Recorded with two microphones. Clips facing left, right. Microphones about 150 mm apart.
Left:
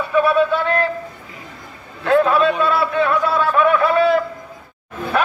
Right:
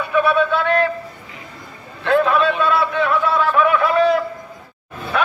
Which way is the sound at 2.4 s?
40° left (ahead or behind).